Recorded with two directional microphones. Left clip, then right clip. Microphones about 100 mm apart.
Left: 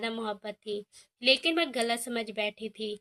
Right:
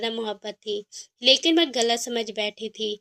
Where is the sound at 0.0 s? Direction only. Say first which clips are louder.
Right 5 dB; 25° right (ahead or behind).